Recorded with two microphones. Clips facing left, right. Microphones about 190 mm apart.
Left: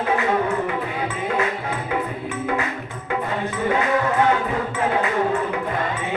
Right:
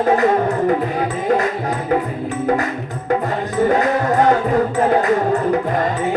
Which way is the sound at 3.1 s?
40° right (ahead or behind).